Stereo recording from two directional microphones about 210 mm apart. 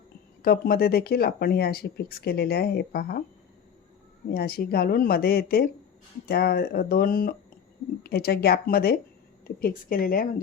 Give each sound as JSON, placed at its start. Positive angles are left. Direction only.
{"t": 0.4, "sound": "speech", "side_deg": 45}
{"t": 4.3, "sound": "speech", "side_deg": 45}